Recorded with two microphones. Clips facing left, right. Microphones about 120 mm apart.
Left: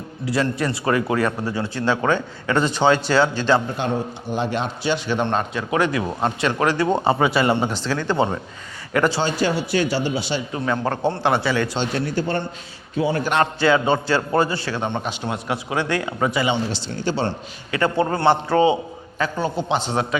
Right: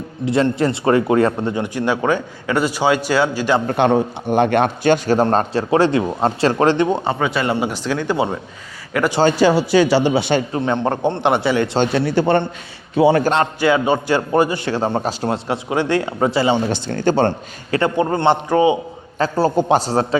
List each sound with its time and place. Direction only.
0.3 s speech: 25° right (ahead or behind)
3.7 s a man's voice: 65° right (ahead or behind); by 6.8 s 30° right (ahead or behind)
6.9 s a man's voice: 5° left (ahead or behind)
7.5 s a man's voice: 10° right (ahead or behind)
9.3 s a man's voice: 90° right; by 10.4 s 60° right (ahead or behind)
10.5 s speech: 25° right (ahead or behind)
11.9 s a man's voice: 75° right (ahead or behind)
13.0 s a man's voice: 75° right (ahead or behind)
13.3 s speech: 20° right (ahead or behind)
14.7 s speech: 35° right (ahead or behind)
16.6 s a man's voice: 55° right (ahead or behind)
17.8 s speech: 20° right (ahead or behind)
19.2 s a man's voice: 40° right (ahead or behind)